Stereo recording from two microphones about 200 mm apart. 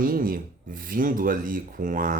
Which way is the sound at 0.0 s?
45° right (ahead or behind).